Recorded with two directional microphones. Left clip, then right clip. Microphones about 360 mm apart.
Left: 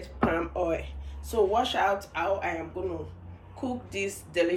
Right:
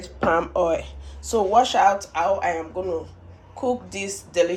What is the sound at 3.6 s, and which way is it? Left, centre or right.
Speech, centre.